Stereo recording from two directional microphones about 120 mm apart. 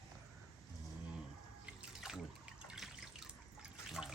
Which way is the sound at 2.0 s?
5° right (ahead or behind).